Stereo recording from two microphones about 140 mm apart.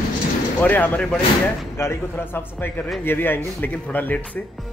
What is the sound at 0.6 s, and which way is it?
A man's voice, 10° left (ahead or behind).